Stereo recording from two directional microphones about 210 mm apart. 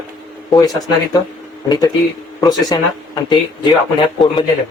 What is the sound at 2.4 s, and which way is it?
Speech, 20° left (ahead or behind).